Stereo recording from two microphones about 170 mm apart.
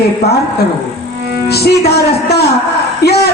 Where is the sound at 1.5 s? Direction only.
70° left (ahead or behind).